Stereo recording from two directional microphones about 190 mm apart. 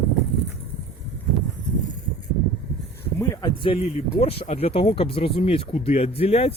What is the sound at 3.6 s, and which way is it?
Speech, 30° left (ahead or behind).